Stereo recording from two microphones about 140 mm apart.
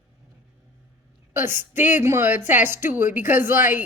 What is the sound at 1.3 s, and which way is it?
A woman's voice, 15° right (ahead or behind).